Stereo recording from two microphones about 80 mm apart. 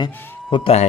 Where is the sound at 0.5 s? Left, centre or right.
Left.